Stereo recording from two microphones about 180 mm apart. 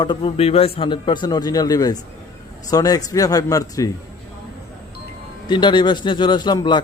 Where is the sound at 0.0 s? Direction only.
30° left (ahead or behind).